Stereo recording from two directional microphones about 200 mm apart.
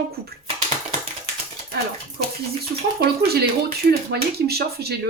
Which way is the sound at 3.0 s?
50° right (ahead or behind).